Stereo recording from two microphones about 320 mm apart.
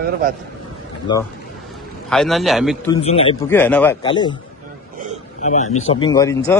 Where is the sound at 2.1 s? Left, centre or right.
Centre.